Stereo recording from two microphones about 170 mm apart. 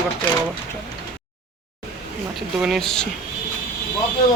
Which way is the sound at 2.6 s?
Centre (ahead or behind).